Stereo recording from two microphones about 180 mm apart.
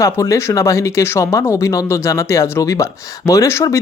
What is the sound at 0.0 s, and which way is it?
Speech, 15° left (ahead or behind).